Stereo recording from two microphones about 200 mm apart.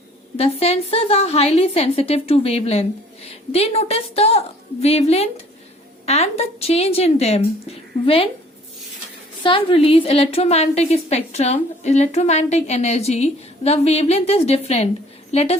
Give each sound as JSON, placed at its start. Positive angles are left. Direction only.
{"t": 0.3, "sound": "a woman's voice", "side_deg": 30}
{"t": 9.4, "sound": "a woman's voice", "side_deg": 25}